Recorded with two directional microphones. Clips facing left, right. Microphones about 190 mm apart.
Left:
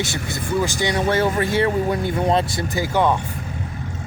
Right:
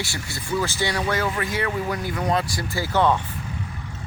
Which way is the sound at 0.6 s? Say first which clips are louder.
Left 5 dB; 15° left (ahead or behind).